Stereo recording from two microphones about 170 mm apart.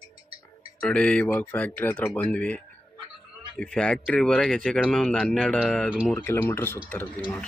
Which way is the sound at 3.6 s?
5° left (ahead or behind).